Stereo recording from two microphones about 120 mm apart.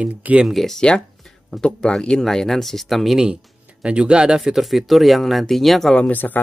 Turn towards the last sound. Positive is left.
turn(degrees=15)  # may be behind; listen again after turning